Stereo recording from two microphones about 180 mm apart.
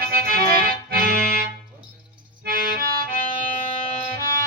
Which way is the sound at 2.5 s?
50° right (ahead or behind).